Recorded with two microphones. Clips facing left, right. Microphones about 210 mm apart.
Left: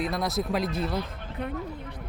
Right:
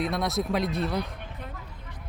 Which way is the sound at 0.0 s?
Centre (ahead or behind).